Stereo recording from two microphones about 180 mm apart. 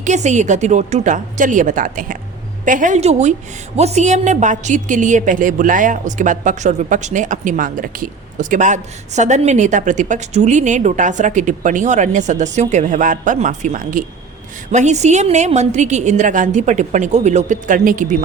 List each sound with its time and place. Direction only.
0.0 s a woman's voice: 40° right (ahead or behind)